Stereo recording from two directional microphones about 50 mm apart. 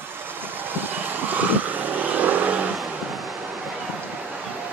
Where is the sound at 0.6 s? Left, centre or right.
Right.